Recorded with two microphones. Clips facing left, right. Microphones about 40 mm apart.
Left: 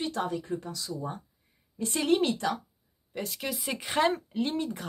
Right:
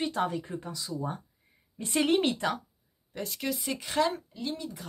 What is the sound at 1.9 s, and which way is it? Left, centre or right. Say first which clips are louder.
Speech: even; right.